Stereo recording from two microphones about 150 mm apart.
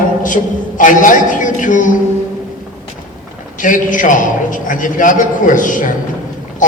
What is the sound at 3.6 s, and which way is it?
A man's voice, 60° left (ahead or behind).